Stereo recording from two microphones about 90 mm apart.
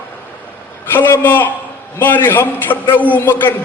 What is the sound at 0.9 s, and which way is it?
A man's voice, 25° left (ahead or behind).